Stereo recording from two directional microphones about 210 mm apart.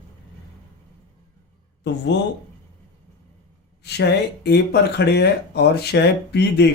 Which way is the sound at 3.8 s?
50° left (ahead or behind).